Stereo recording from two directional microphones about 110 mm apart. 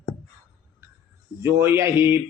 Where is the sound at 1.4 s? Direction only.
20° right (ahead or behind).